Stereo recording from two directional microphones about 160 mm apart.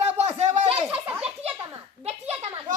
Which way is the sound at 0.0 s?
45° right (ahead or behind).